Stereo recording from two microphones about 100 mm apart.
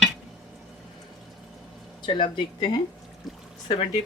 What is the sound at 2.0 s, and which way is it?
Speech, 55° left (ahead or behind).